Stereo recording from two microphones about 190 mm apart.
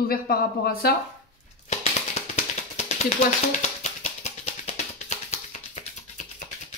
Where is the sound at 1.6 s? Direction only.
35° left (ahead or behind).